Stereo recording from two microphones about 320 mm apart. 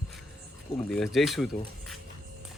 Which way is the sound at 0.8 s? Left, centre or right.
Centre.